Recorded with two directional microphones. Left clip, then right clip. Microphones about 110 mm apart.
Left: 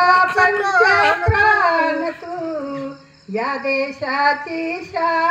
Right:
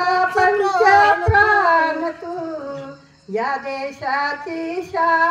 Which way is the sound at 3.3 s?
30° right (ahead or behind).